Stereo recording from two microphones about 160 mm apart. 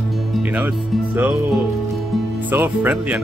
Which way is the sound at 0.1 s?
5° right (ahead or behind).